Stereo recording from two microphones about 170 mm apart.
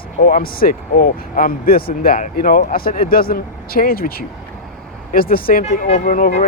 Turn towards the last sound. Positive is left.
turn(degrees=50)  # may be behind; listen again after turning